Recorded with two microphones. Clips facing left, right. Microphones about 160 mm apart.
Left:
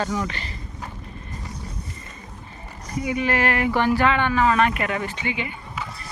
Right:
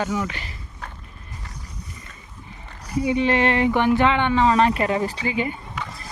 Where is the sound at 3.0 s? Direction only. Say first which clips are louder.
Right 3 dB; 30° right (ahead or behind).